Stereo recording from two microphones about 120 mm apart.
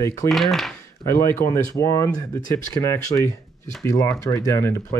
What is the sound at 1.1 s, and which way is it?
Speech, 25° left (ahead or behind).